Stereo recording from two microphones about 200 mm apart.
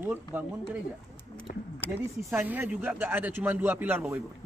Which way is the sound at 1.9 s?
10° right (ahead or behind).